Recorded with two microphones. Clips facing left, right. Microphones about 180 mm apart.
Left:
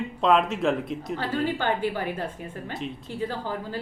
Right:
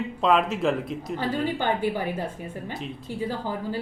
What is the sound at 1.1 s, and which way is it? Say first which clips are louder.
A woman's voice: right 1 dB; 15° right (ahead or behind).